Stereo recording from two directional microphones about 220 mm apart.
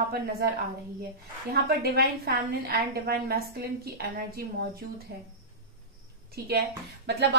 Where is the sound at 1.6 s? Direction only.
45° right (ahead or behind).